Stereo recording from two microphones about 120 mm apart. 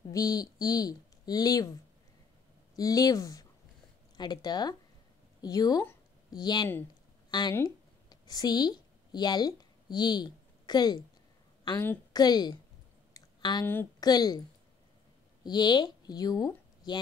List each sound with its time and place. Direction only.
0.1 s speech: 30° left (ahead or behind)
7.5 s a sound: 30° left (ahead or behind)
12.1 s a woman's voice: 35° left (ahead or behind)
13.1 s a sound: 35° left (ahead or behind)
13.9 s speech: 35° left (ahead or behind)
15.4 s speech: 35° left (ahead or behind)